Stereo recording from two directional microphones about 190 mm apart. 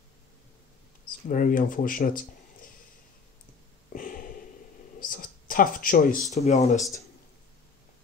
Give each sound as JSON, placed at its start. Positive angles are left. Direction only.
{"t": 1.2, "sound": "speech", "side_deg": 45}
{"t": 3.9, "sound": "a sound", "side_deg": 45}
{"t": 6.3, "sound": "speech", "side_deg": 35}